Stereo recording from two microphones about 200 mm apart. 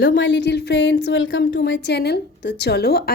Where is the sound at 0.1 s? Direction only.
65° left (ahead or behind).